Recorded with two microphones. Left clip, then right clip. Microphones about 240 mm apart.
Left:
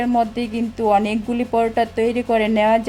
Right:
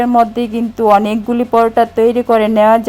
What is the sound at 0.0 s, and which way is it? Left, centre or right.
Speech, centre.